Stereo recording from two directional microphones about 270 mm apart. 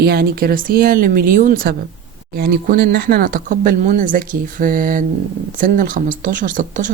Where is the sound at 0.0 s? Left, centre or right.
Right.